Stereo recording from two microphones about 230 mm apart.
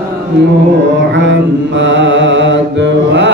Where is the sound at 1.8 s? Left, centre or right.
Right.